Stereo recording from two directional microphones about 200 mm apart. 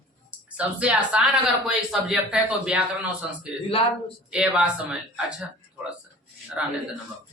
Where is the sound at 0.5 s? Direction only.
5° right (ahead or behind).